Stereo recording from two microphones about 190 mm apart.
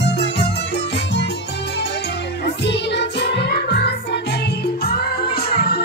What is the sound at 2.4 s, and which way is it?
Music, 65° left (ahead or behind).